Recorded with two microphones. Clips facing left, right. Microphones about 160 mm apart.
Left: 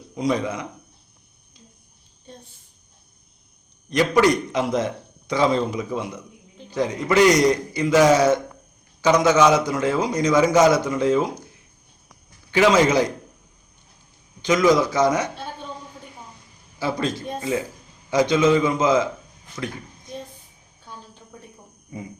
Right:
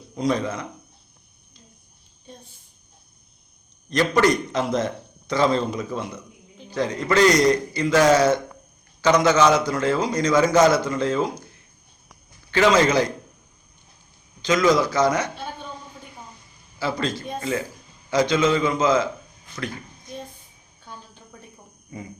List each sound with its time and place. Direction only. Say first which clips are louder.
0.2 s a man's voice: even; 15° left (ahead or behind)
3.8 s a man's voice: left 1 dB; 10° left (ahead or behind)
12.5 s a man's voice: left 1 dB; 15° left (ahead or behind)
14.4 s a man's voice: left 1 dB; 15° left (ahead or behind)
16.8 s a man's voice: left 1 dB; 15° left (ahead or behind)